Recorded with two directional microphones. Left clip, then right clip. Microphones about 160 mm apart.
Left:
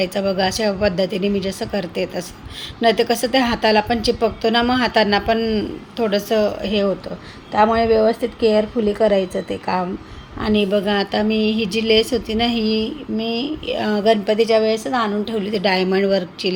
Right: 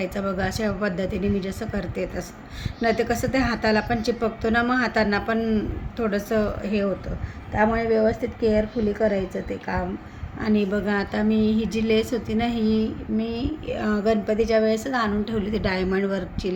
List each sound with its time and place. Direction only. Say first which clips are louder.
0.0 s a woman's voice: left 8 dB; 10° left (ahead or behind)
10.4 s a woman's voice: left 6 dB; 10° left (ahead or behind)